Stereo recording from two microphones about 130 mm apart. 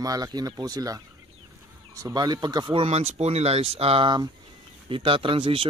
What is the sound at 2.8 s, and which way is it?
Speech, 55° right (ahead or behind).